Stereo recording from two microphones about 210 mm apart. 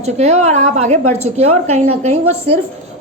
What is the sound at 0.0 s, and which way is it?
A woman's voice, 30° right (ahead or behind).